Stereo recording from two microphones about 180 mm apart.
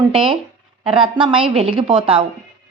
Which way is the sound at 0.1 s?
30° right (ahead or behind).